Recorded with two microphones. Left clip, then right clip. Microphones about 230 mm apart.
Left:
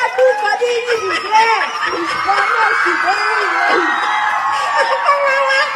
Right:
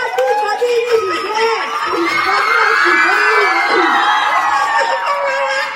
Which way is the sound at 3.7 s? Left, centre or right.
Right.